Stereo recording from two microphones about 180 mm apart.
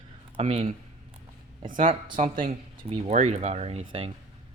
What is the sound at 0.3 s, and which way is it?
Speech, 30° right (ahead or behind).